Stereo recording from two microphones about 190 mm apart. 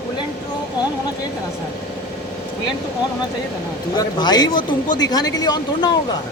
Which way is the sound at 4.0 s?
20° left (ahead or behind).